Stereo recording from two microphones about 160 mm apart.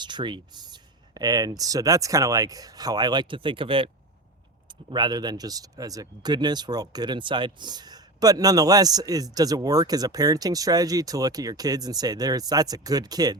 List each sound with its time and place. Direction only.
0.0 s speech: 30° right (ahead or behind)